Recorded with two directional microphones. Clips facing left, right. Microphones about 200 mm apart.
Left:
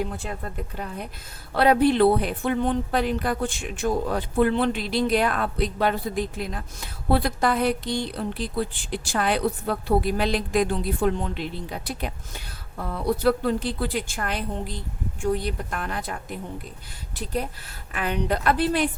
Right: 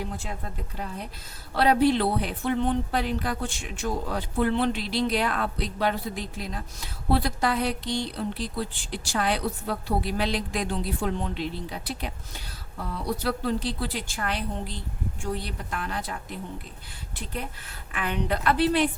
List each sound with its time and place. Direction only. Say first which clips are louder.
1.5 s speech: left 3 dB; 55° left (ahead or behind)
17.2 s speech: left 6 dB; 40° left (ahead or behind)